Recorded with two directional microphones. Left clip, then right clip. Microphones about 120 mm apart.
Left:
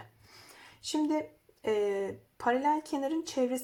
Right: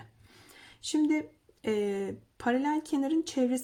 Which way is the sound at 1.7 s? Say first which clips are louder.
Left 1 dB; 35° right (ahead or behind).